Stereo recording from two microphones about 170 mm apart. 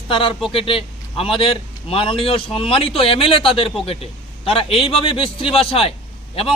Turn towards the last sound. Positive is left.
turn(degrees=35)  # may be behind; listen again after turning